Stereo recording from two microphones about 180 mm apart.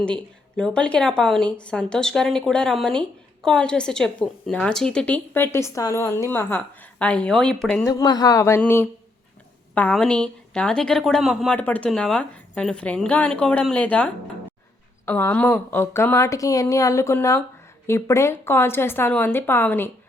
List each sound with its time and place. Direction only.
0.0 s a woman's voice: 5° left (ahead or behind)
7.9 s a woman's voice: 20° left (ahead or behind)